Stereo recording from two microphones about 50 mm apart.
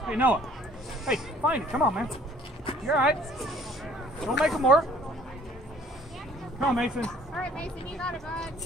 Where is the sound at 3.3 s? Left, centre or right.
Centre.